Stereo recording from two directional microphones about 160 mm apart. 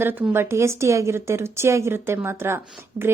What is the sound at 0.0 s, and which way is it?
A woman's voice, 10° right (ahead or behind).